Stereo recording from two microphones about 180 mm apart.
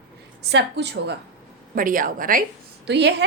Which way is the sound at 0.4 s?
70° right (ahead or behind).